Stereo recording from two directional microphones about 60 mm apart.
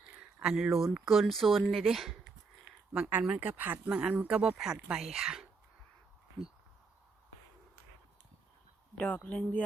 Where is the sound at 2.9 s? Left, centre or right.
Centre.